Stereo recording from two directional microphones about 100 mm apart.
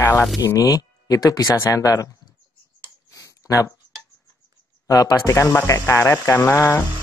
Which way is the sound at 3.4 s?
35° left (ahead or behind).